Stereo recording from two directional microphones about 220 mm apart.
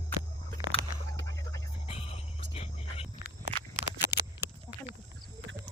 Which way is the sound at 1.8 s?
25° left (ahead or behind).